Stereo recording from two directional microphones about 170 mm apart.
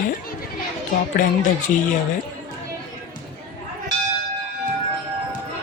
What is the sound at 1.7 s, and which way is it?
Speech, 50° left (ahead or behind).